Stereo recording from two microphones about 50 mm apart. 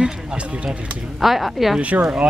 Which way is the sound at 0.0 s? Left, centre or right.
Centre.